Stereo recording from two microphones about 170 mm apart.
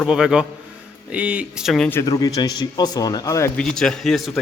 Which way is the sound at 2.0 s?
20° left (ahead or behind).